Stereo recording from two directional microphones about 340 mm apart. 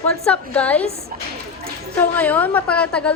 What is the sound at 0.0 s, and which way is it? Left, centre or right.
Speech, centre.